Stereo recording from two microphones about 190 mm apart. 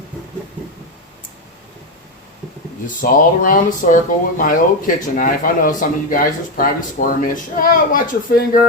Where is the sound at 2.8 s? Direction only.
45° left (ahead or behind).